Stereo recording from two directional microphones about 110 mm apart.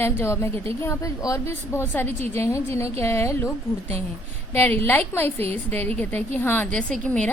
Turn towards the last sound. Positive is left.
turn(degrees=10)  # may be behind; listen again after turning